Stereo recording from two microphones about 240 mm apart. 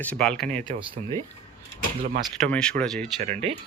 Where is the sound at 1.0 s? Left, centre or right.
Right.